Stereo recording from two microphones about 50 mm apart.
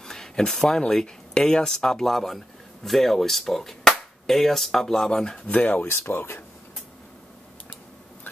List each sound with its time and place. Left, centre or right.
0.0 s speech: centre
5.5 s speech: left
5.9 s speech: left